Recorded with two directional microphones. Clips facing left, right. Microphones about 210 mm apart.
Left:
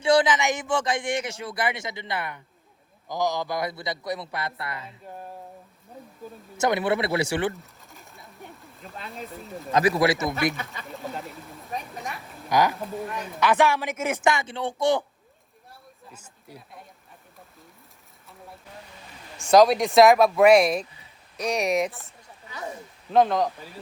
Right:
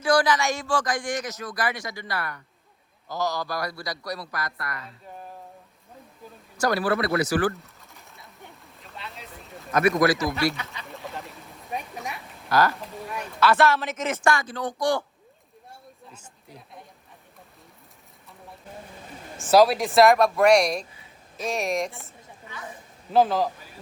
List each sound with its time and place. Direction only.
0.0 s a man's voice: 25° left (ahead or behind)
6.6 s a man's voice: 20° left (ahead or behind)
7.6 s pigeon: centre (ahead or behind)
9.0 s a sound: 50° left (ahead or behind)
9.8 s a man's voice: 25° left (ahead or behind)
10.8 s a sound: centre (ahead or behind)
12.5 s speech: 15° left (ahead or behind)
14.2 s a man's voice: 20° left (ahead or behind)
16.1 s a sound: 10° left (ahead or behind)
19.4 s speech: 5° right (ahead or behind)
23.1 s speech: 5° right (ahead or behind)